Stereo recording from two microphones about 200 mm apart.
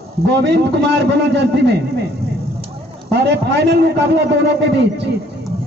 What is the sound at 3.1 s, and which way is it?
A man's voice, 55° right (ahead or behind).